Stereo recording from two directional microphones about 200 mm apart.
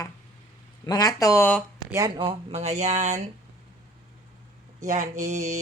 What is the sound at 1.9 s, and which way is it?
Speech, 15° right (ahead or behind).